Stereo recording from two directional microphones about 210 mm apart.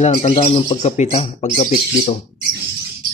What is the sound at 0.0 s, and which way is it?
Speech, 30° left (ahead or behind).